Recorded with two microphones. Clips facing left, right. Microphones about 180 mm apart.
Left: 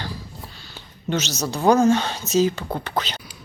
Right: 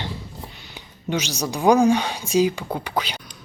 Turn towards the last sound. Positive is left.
turn(degrees=-10)  # may be behind; listen again after turning